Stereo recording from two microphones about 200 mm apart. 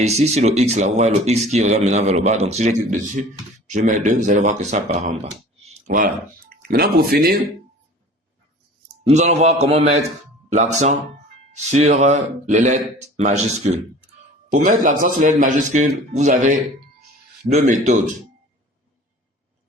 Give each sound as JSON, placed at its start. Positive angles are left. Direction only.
{"t": 0.0, "sound": "speech", "side_deg": -35}
{"t": 5.2, "sound": "a sound", "side_deg": -35}
{"t": 6.7, "sound": "speech", "side_deg": -50}
{"t": 9.0, "sound": "speech", "side_deg": -35}